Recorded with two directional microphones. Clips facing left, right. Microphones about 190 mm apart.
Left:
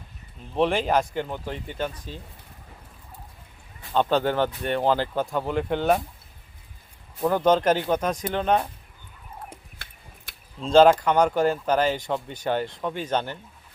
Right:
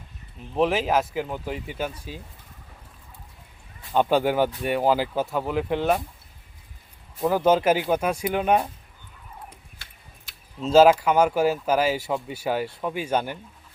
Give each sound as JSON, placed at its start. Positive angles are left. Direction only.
{"t": 0.5, "sound": "speech", "side_deg": -5}
{"t": 3.9, "sound": "speech", "side_deg": -10}
{"t": 7.2, "sound": "speech", "side_deg": -5}
{"t": 9.7, "sound": "tick-tock", "side_deg": 55}
{"t": 10.6, "sound": "speech", "side_deg": -5}